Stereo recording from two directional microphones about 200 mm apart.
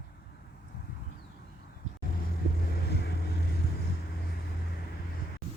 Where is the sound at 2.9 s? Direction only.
55° left (ahead or behind).